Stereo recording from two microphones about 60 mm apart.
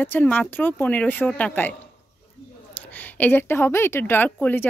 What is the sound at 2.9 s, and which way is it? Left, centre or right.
A woman's voice, left.